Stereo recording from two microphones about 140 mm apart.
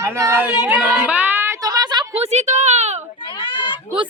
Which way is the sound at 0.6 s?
10° right (ahead or behind).